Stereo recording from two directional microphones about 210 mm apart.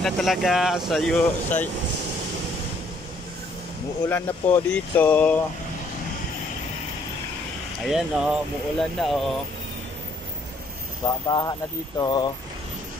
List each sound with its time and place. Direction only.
0.0 s speech: centre (ahead or behind)
4.1 s speech: 10° left (ahead or behind)
7.8 s speech: 5° right (ahead or behind)
11.2 s speech: 20° left (ahead or behind)